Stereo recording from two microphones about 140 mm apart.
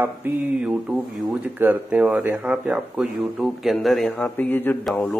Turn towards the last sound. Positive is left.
turn(degrees=5)  # may be behind; listen again after turning